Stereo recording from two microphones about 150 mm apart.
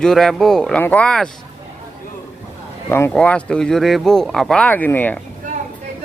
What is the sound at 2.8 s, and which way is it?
Speech, 15° left (ahead or behind).